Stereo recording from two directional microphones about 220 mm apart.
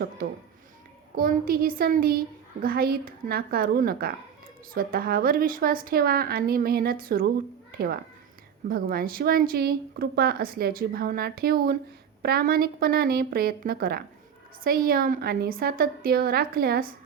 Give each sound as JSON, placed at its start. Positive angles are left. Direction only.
{"t": 1.1, "sound": "a woman's voice", "side_deg": -40}